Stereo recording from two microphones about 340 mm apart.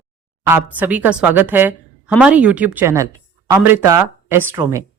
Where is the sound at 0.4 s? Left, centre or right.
Centre.